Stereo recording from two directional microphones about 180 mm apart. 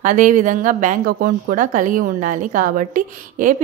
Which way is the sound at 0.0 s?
45° right (ahead or behind).